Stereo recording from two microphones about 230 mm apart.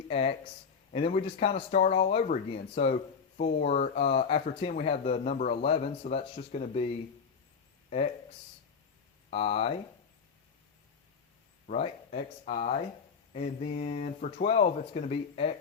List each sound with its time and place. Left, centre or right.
0.1 s speech: left
9.3 s speech: left
11.7 s speech: left